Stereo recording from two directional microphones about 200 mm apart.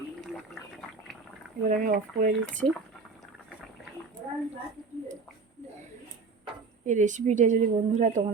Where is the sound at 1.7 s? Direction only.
45° right (ahead or behind).